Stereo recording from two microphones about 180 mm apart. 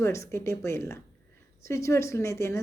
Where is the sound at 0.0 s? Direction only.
15° left (ahead or behind).